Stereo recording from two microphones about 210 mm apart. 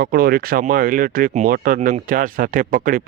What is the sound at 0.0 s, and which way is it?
Speech, 45° right (ahead or behind).